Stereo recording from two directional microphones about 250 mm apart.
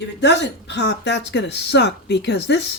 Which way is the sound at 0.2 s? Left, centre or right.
Left.